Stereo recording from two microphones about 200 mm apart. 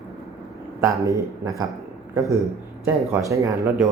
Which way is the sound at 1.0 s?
15° right (ahead or behind).